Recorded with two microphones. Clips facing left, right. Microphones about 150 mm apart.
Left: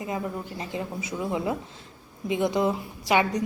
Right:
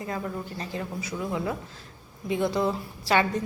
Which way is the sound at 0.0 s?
15° left (ahead or behind).